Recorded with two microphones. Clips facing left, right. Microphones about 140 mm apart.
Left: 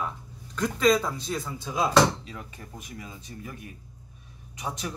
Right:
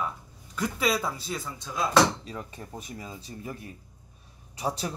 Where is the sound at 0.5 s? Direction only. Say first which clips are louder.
Left 5 dB; 5° right (ahead or behind).